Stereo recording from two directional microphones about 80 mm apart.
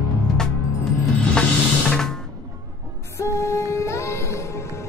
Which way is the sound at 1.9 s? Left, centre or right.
Centre.